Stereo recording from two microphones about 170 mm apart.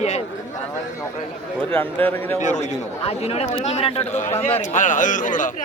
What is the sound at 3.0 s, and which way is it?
Speech, 40° left (ahead or behind).